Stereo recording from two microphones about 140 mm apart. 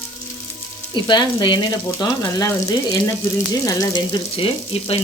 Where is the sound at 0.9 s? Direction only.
35° left (ahead or behind).